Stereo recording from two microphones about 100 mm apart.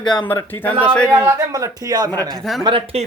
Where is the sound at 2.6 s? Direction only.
60° right (ahead or behind).